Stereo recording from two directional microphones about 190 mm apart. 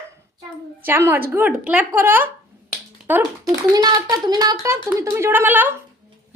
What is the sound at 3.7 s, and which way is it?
Speech, 20° right (ahead or behind).